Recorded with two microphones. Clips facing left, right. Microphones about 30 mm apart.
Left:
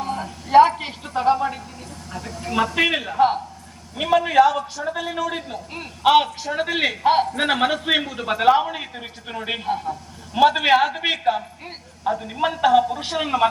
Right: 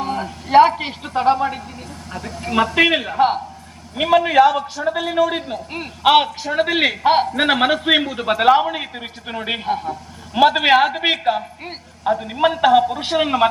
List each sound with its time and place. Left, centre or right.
0.0 s a man's voice: right